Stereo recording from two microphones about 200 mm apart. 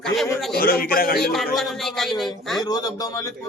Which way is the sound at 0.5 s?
45° left (ahead or behind).